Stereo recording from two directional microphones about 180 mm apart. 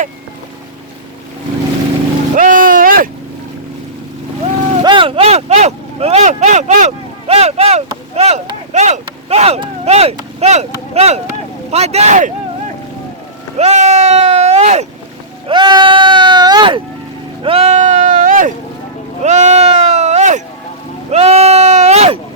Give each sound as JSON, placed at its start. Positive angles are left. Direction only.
{"t": 2.3, "sound": "vehicle", "side_deg": -45}
{"t": 4.8, "sound": "a sound", "side_deg": -25}
{"t": 10.4, "sound": "speech", "side_deg": -35}
{"t": 13.6, "sound": "speech", "side_deg": -35}
{"t": 15.4, "sound": "speech", "side_deg": -25}
{"t": 17.4, "sound": "sheep", "side_deg": -35}
{"t": 21.1, "sound": "speech", "side_deg": -35}